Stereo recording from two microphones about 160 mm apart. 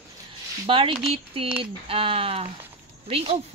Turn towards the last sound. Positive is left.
turn(degrees=-35)  # may be behind; listen again after turning